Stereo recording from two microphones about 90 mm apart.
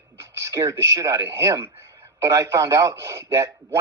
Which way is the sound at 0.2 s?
30° right (ahead or behind).